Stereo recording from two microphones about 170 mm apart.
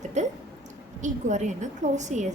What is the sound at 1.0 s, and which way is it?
A woman's voice, 45° right (ahead or behind).